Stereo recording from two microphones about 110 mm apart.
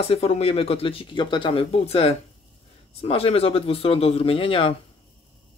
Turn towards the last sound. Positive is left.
turn(degrees=55)  # may be behind; listen again after turning